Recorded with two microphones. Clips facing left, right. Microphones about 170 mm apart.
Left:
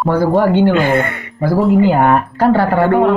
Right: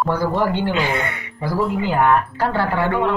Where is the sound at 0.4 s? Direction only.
50° left (ahead or behind).